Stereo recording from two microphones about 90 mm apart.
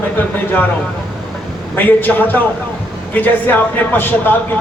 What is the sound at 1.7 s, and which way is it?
A man's voice, 20° left (ahead or behind).